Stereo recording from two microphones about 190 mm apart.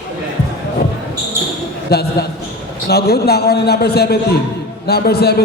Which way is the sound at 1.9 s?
55° left (ahead or behind).